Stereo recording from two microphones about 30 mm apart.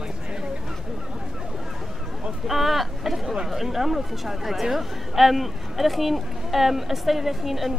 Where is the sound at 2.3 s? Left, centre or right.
Centre.